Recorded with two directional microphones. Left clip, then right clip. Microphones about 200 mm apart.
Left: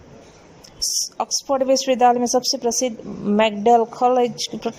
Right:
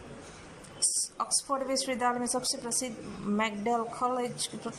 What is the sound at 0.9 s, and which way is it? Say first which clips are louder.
A woman's voice: left 10 dB; 50° left (ahead or behind).